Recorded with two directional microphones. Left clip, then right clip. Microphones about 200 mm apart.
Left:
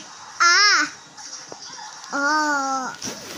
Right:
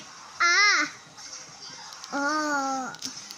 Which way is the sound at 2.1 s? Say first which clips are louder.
Left 6 dB; 10° right (ahead or behind).